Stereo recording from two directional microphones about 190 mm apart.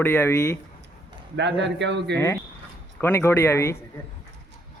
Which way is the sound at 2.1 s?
15° left (ahead or behind).